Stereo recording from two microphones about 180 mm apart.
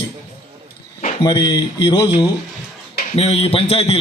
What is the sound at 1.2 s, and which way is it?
Speech, 25° left (ahead or behind).